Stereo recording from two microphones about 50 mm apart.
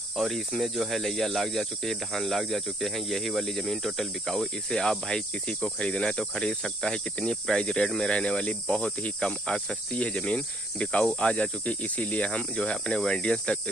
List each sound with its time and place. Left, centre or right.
0.1 s speech: centre
8.1 s cricket: centre